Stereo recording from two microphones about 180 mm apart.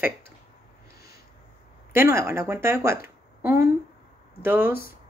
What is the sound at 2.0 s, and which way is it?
A woman's voice, 15° right (ahead or behind).